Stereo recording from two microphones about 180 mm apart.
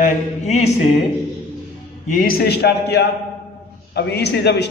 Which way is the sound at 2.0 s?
50° left (ahead or behind).